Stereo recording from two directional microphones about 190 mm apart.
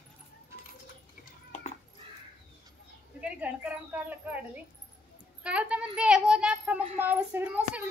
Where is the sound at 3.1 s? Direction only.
5° right (ahead or behind).